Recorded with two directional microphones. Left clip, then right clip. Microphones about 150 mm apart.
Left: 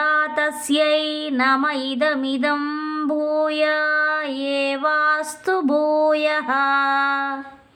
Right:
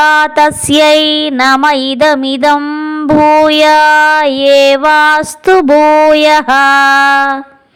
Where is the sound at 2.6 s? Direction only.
40° right (ahead or behind).